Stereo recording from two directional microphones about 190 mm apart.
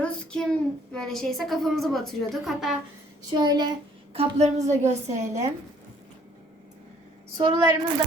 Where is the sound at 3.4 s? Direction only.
20° right (ahead or behind).